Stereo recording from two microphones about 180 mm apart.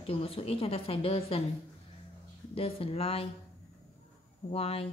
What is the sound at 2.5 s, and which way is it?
Speech, 30° left (ahead or behind).